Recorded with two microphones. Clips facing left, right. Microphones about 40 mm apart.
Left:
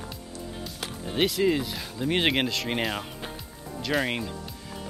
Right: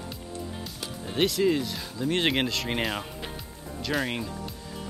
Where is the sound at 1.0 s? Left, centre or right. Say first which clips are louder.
Even; centre.